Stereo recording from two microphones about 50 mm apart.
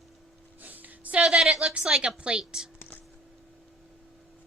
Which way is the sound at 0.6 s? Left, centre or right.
Right.